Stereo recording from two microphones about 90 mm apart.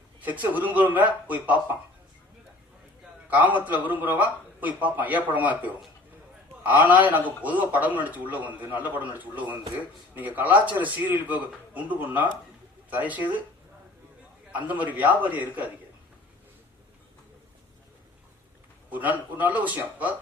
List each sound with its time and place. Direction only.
0.2 s a man's voice: 20° right (ahead or behind)
3.2 s a man's voice: 20° right (ahead or behind)
14.5 s a man's voice: 20° right (ahead or behind)
18.9 s a man's voice: 20° right (ahead or behind)